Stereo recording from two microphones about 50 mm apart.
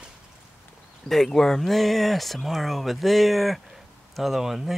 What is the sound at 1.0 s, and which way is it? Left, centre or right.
Speech, centre.